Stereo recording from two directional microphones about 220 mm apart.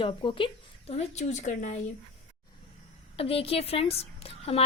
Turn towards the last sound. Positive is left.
turn(degrees=25)  # may be behind; listen again after turning